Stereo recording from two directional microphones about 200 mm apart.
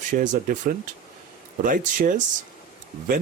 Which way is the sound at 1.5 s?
40° right (ahead or behind).